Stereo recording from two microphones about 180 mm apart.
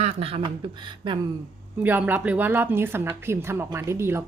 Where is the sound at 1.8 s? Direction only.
10° right (ahead or behind).